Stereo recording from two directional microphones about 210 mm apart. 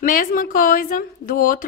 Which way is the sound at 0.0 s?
40° left (ahead or behind).